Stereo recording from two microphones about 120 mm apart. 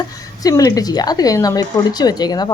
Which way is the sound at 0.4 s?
30° left (ahead or behind).